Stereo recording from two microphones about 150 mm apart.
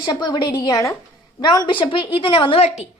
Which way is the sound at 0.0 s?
30° left (ahead or behind).